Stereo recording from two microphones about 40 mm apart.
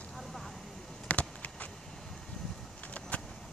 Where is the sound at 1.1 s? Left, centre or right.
Left.